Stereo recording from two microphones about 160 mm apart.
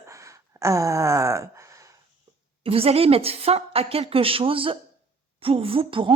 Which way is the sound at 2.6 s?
35° right (ahead or behind).